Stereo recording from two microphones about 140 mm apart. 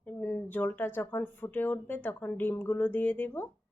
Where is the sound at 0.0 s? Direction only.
10° left (ahead or behind).